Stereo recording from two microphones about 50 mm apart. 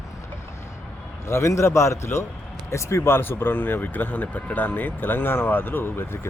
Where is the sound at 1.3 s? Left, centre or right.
Left.